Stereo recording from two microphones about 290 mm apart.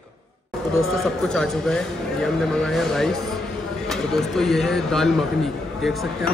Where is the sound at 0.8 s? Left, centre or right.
Centre.